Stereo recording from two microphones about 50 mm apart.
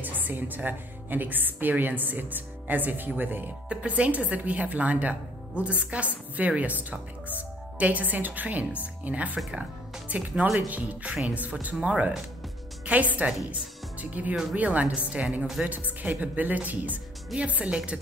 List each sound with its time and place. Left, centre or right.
0.0 s a woman's voice: right
3.6 s a woman's voice: right